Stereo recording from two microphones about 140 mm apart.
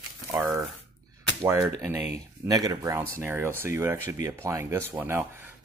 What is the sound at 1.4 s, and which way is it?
Speech, 20° right (ahead or behind).